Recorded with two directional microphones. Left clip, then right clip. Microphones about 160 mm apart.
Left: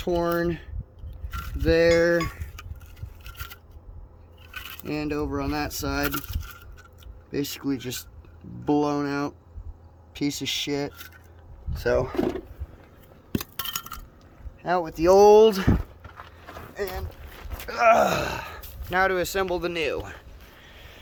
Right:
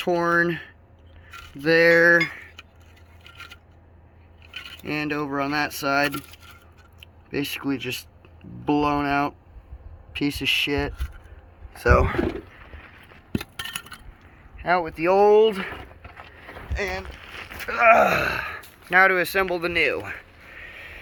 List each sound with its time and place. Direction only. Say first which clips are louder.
0.0 s speech: right 4 dB; 10° left (ahead or behind)
4.8 s speech: right 2 dB; 15° left (ahead or behind)
7.3 s speech: right 2 dB; 20° left (ahead or behind)
13.3 s a sound: even; centre (ahead or behind)
14.6 s speech: right 2 dB; 10° left (ahead or behind)
15.2 s speech: left 2 dB; 30° left (ahead or behind)
16.8 s speech: right 3 dB; 25° right (ahead or behind)
17.3 s speech: right 4 dB; 10° left (ahead or behind)
20.6 s a sound: right 10 dB; centre (ahead or behind)